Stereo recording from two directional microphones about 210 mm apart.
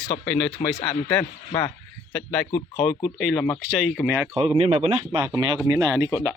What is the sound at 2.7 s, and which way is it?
Speech, 20° left (ahead or behind).